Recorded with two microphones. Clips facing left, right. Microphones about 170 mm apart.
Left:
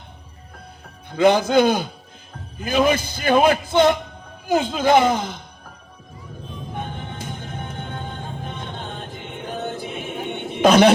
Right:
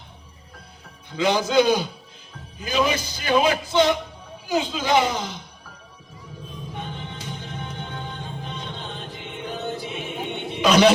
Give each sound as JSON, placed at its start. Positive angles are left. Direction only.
{"t": 1.1, "sound": "speech", "side_deg": 55}
{"t": 6.7, "sound": "music", "side_deg": 50}